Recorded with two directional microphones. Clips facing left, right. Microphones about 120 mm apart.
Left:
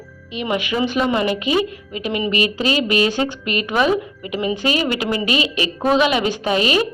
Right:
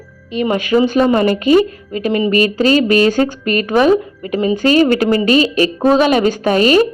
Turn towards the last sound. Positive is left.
turn(degrees=-40)  # may be behind; listen again after turning